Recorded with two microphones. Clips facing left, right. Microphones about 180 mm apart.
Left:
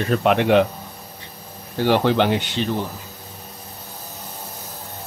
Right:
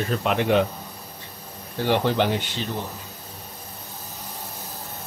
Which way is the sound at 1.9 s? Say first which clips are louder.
Left 4 dB; 75° left (ahead or behind).